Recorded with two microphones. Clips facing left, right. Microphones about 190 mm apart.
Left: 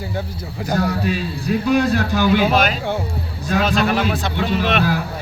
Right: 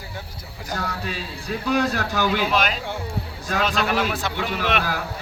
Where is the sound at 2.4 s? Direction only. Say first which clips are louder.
Left 6 dB; 45° left (ahead or behind).